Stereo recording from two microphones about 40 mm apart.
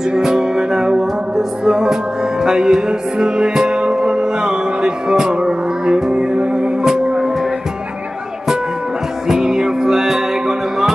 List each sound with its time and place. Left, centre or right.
0.1 s music: centre
9.3 s music: centre